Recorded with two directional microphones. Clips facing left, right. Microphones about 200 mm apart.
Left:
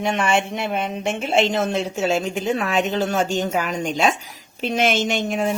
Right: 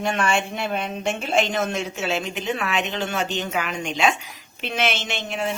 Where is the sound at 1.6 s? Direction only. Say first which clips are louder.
Left 4 dB; 35° left (ahead or behind).